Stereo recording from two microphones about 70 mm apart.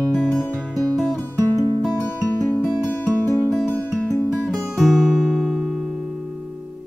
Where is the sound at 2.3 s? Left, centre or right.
Left.